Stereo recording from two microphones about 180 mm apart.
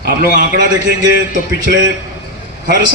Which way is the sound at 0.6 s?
70° right (ahead or behind).